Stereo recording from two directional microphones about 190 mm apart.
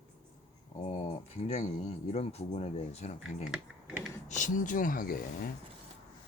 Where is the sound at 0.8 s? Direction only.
30° left (ahead or behind).